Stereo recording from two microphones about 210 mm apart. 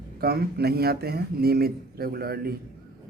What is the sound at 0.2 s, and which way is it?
Speech, 45° right (ahead or behind).